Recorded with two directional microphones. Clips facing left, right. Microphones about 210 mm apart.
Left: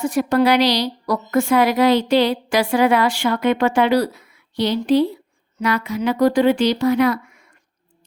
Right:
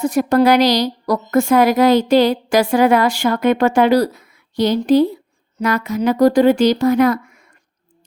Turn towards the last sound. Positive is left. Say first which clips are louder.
# right 3 dB
turn(degrees=-45)  # may be behind; listen again after turning